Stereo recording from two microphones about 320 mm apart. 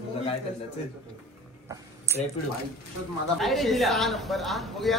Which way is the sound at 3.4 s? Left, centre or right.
Centre.